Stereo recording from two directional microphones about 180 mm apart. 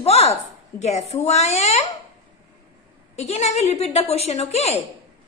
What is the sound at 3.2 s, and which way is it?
A woman's voice, 35° left (ahead or behind).